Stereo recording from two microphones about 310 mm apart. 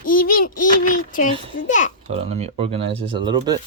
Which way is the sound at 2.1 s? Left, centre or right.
Centre.